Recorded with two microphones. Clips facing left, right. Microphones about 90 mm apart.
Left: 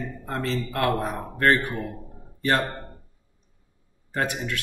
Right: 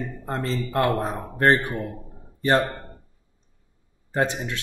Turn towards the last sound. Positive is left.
turn(degrees=-25)  # may be behind; listen again after turning